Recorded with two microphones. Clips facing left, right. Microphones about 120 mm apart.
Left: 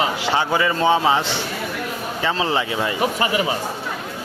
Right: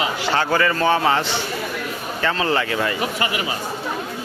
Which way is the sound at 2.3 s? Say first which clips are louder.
Right 1 dB; 20° left (ahead or behind).